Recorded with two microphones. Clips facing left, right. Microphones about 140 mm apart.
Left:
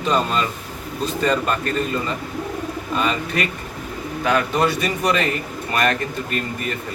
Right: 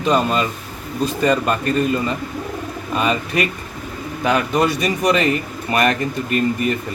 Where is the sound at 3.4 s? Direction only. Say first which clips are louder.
Right 3 dB; 15° right (ahead or behind).